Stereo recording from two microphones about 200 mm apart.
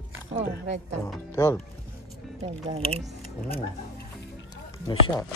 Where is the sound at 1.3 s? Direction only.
15° left (ahead or behind).